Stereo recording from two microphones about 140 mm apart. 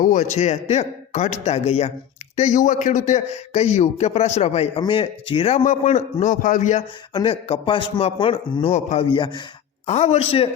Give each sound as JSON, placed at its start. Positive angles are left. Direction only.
{"t": 0.0, "sound": "a man's voice", "side_deg": 60}
{"t": 2.3, "sound": "a man's voice", "side_deg": 60}
{"t": 5.6, "sound": "a man's voice", "side_deg": 55}
{"t": 7.1, "sound": "a man's voice", "side_deg": 35}
{"t": 8.7, "sound": "a man's voice", "side_deg": 55}
{"t": 9.0, "sound": "a man's voice", "side_deg": 35}
{"t": 9.8, "sound": "a man's voice", "side_deg": 50}